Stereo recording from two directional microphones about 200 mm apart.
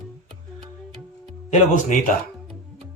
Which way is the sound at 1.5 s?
40° left (ahead or behind).